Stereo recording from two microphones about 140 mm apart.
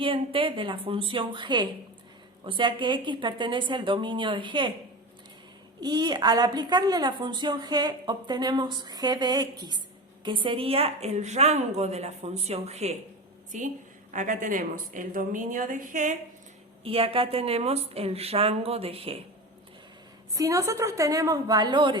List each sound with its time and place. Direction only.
0.0 s a woman's voice: 40° right (ahead or behind)
5.8 s a woman's voice: 30° right (ahead or behind); by 16.1 s 70° right (ahead or behind)
16.8 s a woman's voice: 40° right (ahead or behind)
20.3 s a woman's voice: 25° right (ahead or behind)